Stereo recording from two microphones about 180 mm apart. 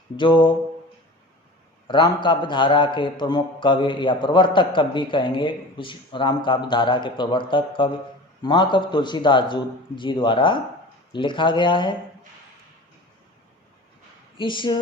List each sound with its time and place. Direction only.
0.2 s a man's voice: 25° left (ahead or behind)
1.9 s a man's voice: 25° left (ahead or behind)
14.3 s a man's voice: 25° left (ahead or behind)